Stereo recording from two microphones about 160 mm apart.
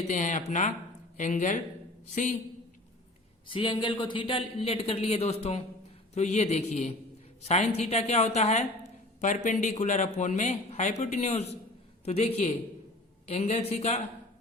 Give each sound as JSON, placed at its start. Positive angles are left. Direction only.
{"t": 0.1, "sound": "speech", "side_deg": 50}
{"t": 3.4, "sound": "a man's voice", "side_deg": 30}